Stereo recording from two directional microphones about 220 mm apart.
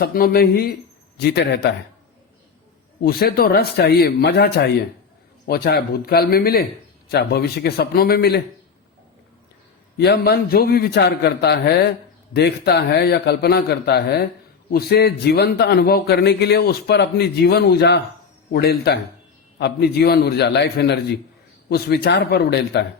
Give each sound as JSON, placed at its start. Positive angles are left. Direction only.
{"t": 0.0, "sound": "a man's voice", "side_deg": 40}
{"t": 3.0, "sound": "a man's voice", "side_deg": 45}
{"t": 10.0, "sound": "a man's voice", "side_deg": 45}